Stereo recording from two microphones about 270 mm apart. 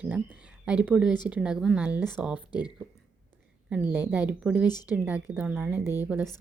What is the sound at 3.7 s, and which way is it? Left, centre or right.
Speech, centre.